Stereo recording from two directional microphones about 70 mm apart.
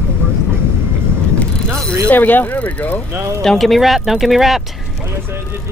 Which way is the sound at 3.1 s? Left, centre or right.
Right.